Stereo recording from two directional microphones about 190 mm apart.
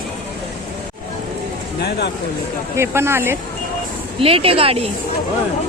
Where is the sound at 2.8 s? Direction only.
15° right (ahead or behind).